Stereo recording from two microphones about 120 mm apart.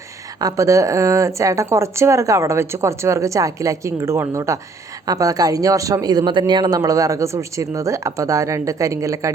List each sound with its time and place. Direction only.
0.3 s speech: 30° right (ahead or behind)